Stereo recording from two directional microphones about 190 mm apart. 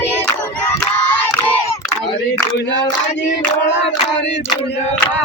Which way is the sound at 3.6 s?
70° left (ahead or behind).